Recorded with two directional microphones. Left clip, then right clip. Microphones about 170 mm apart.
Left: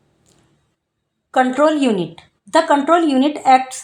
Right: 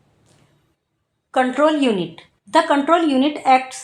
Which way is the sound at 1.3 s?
40° left (ahead or behind).